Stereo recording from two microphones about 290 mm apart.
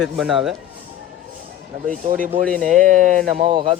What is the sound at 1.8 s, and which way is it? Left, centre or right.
A man's voice, right.